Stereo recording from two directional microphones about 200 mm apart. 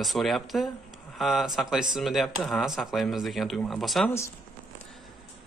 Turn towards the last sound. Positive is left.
turn(degrees=0)  # may be behind; listen again after turning